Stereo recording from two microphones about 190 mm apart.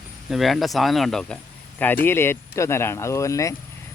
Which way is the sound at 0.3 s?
Centre (ahead or behind).